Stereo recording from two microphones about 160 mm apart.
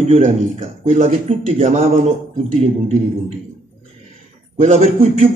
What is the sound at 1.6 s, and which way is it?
Speech, 45° right (ahead or behind).